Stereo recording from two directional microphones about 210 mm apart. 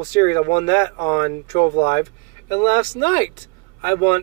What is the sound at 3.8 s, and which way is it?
Speech, 20° left (ahead or behind).